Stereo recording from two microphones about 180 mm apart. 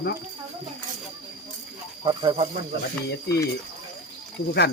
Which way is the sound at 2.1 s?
30° right (ahead or behind).